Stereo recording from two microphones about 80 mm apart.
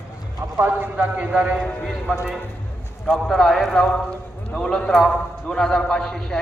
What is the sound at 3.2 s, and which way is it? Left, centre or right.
A man's voice, centre.